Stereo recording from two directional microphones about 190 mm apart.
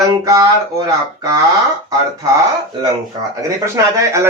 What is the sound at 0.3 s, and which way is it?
Speech, 15° right (ahead or behind).